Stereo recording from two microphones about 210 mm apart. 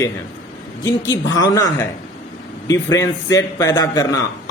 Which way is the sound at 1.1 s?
15° left (ahead or behind).